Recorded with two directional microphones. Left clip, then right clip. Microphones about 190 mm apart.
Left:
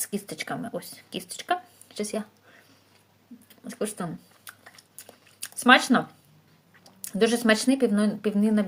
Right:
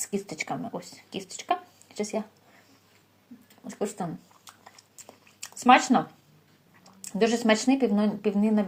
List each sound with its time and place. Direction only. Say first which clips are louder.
0.0 s speech: right 1 dB; 25° left (ahead or behind)
3.7 s speech: even; 30° left (ahead or behind)
5.5 s speech: even; 30° left (ahead or behind)